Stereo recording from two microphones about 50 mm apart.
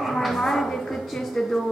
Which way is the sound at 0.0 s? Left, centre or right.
Centre.